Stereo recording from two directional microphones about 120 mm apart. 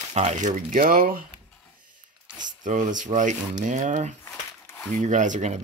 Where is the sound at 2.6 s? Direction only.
90° right.